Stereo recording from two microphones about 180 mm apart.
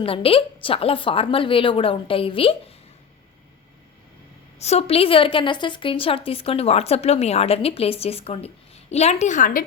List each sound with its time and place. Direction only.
0.0 s a woman's voice: 30° left (ahead or behind)
4.6 s a woman's voice: 35° left (ahead or behind)